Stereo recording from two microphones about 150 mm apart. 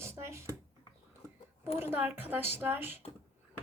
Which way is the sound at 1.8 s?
15° right (ahead or behind).